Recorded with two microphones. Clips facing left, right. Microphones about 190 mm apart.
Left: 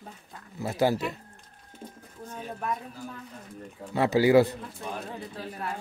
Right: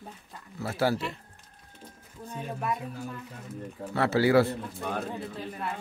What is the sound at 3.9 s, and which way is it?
Speech, 15° left (ahead or behind).